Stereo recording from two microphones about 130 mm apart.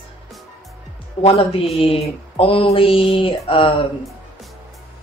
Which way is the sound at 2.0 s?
45° left (ahead or behind).